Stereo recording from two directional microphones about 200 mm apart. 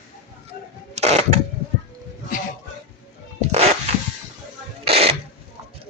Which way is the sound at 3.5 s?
35° right (ahead or behind).